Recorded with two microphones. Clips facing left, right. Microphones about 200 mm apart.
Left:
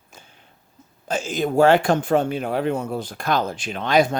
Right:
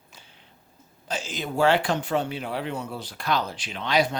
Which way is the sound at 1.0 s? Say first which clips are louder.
Left 8 dB; 50° left (ahead or behind).